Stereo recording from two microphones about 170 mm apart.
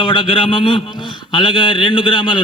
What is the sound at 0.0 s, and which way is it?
A man's voice, 30° left (ahead or behind).